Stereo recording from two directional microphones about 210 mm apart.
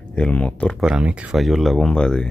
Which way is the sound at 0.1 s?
5° left (ahead or behind).